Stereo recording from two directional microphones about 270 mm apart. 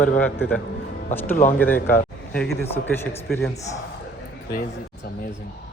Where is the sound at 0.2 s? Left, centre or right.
Centre.